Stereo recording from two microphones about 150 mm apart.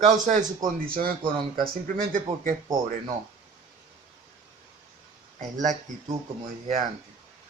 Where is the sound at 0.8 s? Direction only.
70° right (ahead or behind).